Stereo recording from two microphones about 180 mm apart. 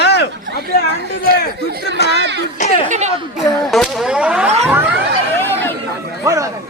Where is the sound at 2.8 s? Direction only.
40° right (ahead or behind).